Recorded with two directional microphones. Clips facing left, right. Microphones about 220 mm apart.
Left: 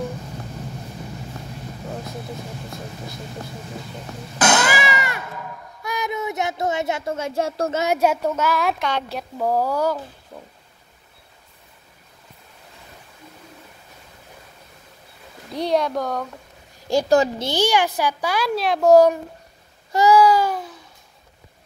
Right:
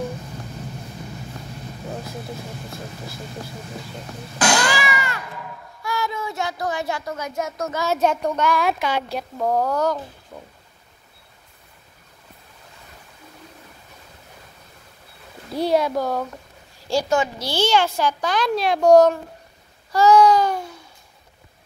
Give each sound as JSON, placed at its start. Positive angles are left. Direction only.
{"t": 4.5, "sound": "cat", "side_deg": 20}
{"t": 5.8, "sound": "speech", "side_deg": 20}
{"t": 7.8, "sound": "a child's voice", "side_deg": 10}
{"t": 15.5, "sound": "speech", "side_deg": -5}
{"t": 16.9, "sound": "a woman's voice", "side_deg": 20}
{"t": 19.9, "sound": "babbling", "side_deg": 15}
{"t": 20.2, "sound": "speech", "side_deg": 5}